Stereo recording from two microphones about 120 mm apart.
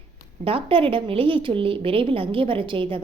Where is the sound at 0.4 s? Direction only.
50° right (ahead or behind).